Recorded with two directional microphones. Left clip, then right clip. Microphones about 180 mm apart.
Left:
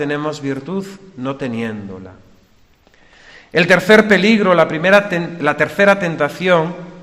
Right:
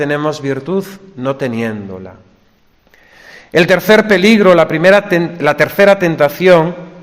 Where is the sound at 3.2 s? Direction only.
35° right (ahead or behind).